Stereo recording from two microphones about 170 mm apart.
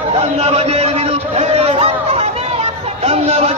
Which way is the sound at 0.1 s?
35° right (ahead or behind).